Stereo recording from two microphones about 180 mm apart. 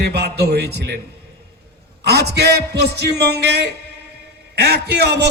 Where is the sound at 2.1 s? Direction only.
65° right (ahead or behind).